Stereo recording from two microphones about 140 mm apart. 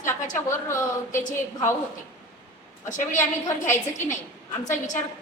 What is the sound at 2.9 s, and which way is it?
Speech, 65° left (ahead or behind).